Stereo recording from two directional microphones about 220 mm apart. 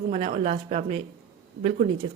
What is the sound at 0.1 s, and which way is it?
Speech, 30° right (ahead or behind).